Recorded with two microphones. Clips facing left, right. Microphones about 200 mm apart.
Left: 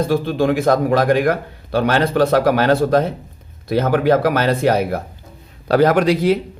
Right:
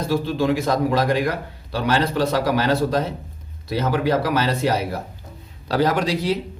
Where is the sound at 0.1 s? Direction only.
55° left (ahead or behind).